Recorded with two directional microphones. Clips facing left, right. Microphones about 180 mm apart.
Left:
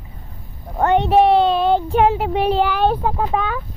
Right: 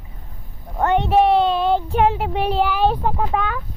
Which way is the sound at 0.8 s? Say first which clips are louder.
Left 2 dB; 30° left (ahead or behind).